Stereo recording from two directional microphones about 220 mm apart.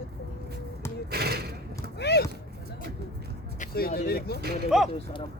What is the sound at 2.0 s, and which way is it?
Speech, 50° left (ahead or behind).